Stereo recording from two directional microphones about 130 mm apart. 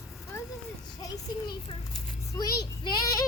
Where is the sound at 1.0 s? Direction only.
30° left (ahead or behind).